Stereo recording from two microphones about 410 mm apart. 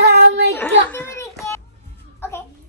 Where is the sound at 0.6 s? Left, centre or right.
Centre.